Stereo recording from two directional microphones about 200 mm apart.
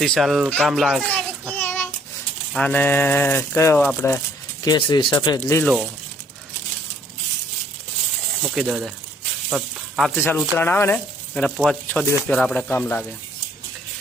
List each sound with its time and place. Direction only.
0.0 s a child's voice: centre (ahead or behind)
4.6 s speech: 20° left (ahead or behind)
8.4 s speech: 5° right (ahead or behind)
9.5 s sizzle: centre (ahead or behind)
10.2 s speech: 10° left (ahead or behind)